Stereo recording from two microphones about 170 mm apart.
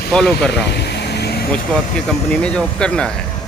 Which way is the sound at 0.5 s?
75° left (ahead or behind).